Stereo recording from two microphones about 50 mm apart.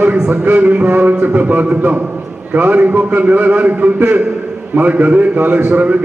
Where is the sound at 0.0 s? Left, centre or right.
Right.